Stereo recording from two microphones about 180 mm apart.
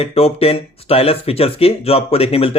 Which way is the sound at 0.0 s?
35° left (ahead or behind).